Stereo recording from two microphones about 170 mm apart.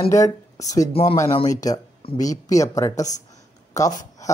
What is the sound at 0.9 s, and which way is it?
Speech, 35° left (ahead or behind).